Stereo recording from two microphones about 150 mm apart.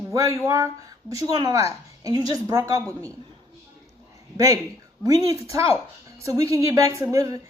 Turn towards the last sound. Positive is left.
turn(degrees=-20)  # may be behind; listen again after turning